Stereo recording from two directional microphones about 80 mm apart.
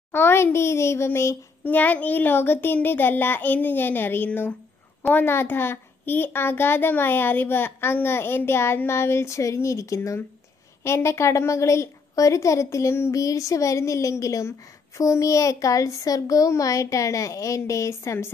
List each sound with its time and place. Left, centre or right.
0.1 s a woman's voice: left
1.6 s a child's voice: left